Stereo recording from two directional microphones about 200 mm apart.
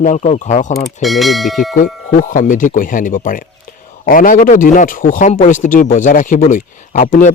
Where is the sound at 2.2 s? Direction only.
40° left (ahead or behind).